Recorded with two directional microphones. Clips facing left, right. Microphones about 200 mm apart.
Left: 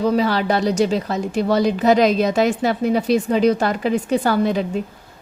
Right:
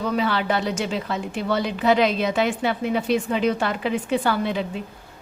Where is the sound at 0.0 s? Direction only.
35° left (ahead or behind).